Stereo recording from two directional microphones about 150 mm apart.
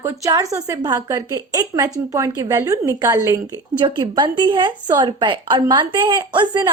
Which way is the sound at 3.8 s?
30° right (ahead or behind).